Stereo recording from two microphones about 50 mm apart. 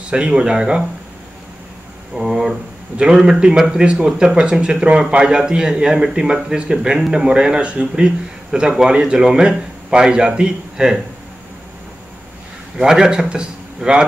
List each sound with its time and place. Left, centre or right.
0.1 s speech: centre
2.1 s speech: centre
12.7 s a man's voice: centre